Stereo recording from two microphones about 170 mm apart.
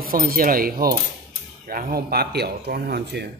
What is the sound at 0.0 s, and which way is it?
Speech, 60° right (ahead or behind).